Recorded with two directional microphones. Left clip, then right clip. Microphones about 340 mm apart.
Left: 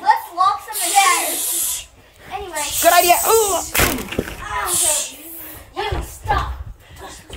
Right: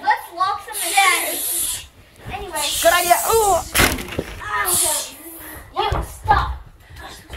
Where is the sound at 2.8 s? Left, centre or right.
Centre.